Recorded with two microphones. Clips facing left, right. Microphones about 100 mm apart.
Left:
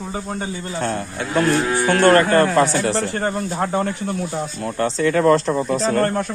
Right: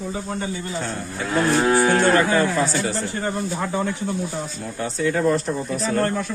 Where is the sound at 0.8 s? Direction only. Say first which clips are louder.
Left 4 dB; 65° left (ahead or behind); by 5.6 s 85° left.